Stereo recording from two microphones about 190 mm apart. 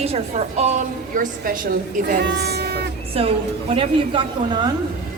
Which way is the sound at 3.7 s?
30° right (ahead or behind).